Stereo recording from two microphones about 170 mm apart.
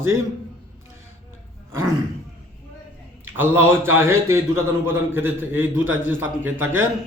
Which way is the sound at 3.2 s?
15° right (ahead or behind).